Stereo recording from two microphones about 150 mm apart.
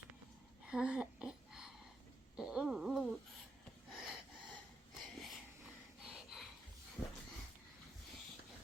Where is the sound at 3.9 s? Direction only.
5° right (ahead or behind).